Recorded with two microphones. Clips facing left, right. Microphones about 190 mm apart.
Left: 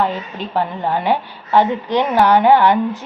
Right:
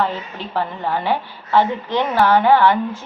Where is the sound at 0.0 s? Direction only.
15° left (ahead or behind).